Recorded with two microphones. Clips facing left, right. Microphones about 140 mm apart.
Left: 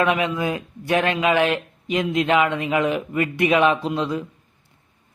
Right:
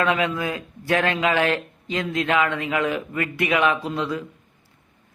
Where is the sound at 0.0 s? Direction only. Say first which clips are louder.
Left 2 dB; 20° left (ahead or behind).